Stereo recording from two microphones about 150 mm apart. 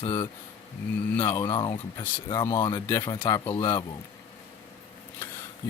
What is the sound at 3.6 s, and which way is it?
Speech, 25° left (ahead or behind).